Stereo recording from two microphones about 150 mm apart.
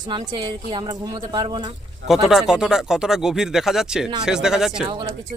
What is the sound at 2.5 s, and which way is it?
Speech, 5° right (ahead or behind).